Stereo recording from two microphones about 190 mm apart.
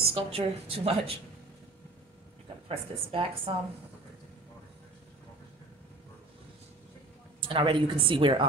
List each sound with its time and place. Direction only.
0.0 s a woman's voice: 30° right (ahead or behind)
2.7 s a woman's voice: 30° right (ahead or behind)
7.4 s a woman's voice: 25° right (ahead or behind)